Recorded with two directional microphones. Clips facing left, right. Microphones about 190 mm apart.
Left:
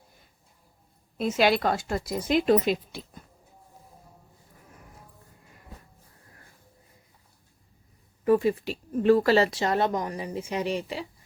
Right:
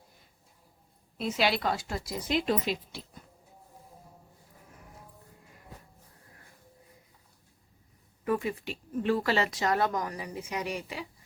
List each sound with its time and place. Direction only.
1.2 s speech: 50° left (ahead or behind)
8.2 s speech: 30° left (ahead or behind)